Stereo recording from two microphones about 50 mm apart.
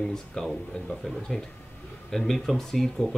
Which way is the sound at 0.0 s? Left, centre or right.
Centre.